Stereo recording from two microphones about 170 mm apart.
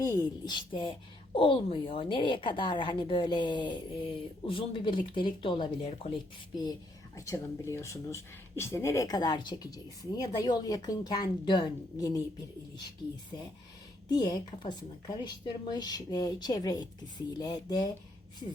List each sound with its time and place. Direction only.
0.0 s speech: 20° left (ahead or behind)
13.3 s speech: 20° left (ahead or behind)